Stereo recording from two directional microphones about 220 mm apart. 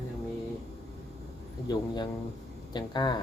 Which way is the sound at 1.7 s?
20° left (ahead or behind).